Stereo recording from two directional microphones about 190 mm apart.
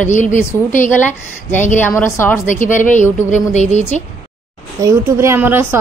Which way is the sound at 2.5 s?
40° left (ahead or behind).